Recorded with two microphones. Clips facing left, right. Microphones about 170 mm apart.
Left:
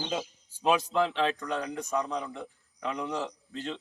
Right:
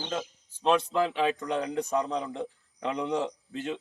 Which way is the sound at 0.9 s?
5° right (ahead or behind).